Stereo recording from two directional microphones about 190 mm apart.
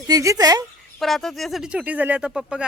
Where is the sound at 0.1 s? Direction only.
20° right (ahead or behind).